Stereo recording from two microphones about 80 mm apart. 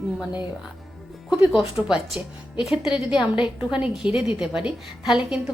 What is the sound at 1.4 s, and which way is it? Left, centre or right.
Speech, centre.